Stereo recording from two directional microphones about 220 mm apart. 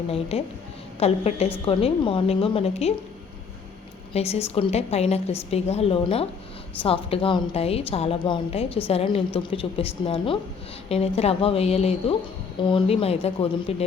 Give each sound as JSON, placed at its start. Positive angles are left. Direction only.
{"t": 0.1, "sound": "a woman's voice", "side_deg": 25}
{"t": 4.1, "sound": "a woman's voice", "side_deg": 30}